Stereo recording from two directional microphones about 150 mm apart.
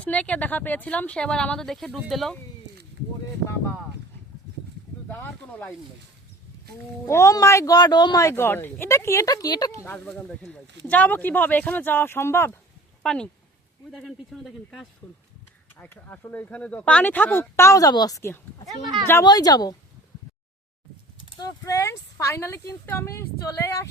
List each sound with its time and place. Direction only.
0.0 s speech: 10° left (ahead or behind)
5.0 s speech: 15° left (ahead or behind)
7.1 s speech: 20° left (ahead or behind)
13.0 s speech: 5° left (ahead or behind)
15.8 s speech: 10° left (ahead or behind)
21.3 s speech: 25° left (ahead or behind)